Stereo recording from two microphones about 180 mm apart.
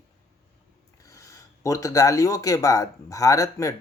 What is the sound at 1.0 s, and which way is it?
Speech, 15° left (ahead or behind).